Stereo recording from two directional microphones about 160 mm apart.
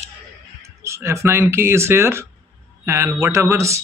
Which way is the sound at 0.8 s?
20° right (ahead or behind).